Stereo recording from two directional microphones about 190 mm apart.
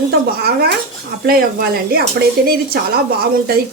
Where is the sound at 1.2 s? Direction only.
55° right (ahead or behind).